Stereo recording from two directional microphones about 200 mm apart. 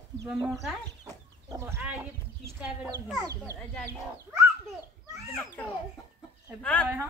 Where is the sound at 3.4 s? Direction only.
10° left (ahead or behind).